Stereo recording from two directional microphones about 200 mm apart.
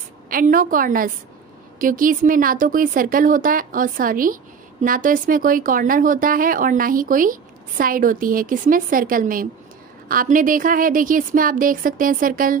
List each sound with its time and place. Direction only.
0.3 s speech: 45° right (ahead or behind)